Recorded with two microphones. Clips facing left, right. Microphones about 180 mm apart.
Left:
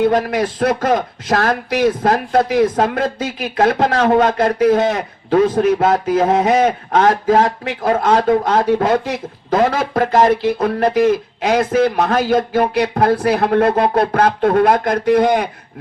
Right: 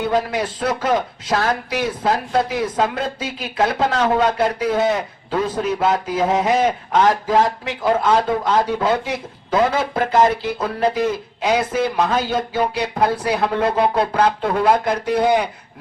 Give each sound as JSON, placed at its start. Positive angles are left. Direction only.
{"t": 0.0, "sound": "a man's voice", "side_deg": 55}